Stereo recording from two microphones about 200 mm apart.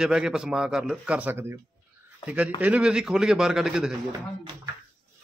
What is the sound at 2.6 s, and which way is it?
Speech, 5° right (ahead or behind).